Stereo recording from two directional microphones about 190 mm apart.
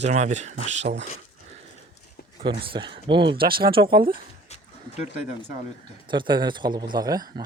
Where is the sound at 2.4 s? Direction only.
30° right (ahead or behind).